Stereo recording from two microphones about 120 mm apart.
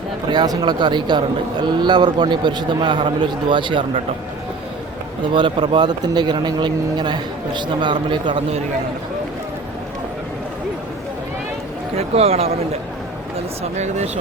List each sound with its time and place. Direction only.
0.3 s a man's voice: 40° right (ahead or behind)
5.3 s a man's voice: 40° right (ahead or behind)
11.9 s speech: 60° right (ahead or behind)
13.7 s speech: 75° right (ahead or behind)